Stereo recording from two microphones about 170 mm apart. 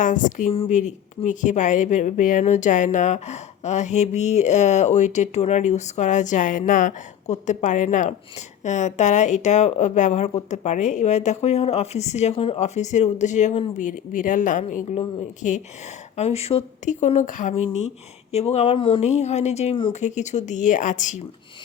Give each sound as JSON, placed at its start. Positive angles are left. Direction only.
{"t": 0.0, "sound": "speech", "side_deg": 50}